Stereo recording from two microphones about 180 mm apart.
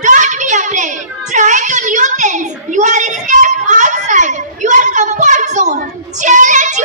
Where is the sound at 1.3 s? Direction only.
45° right (ahead or behind).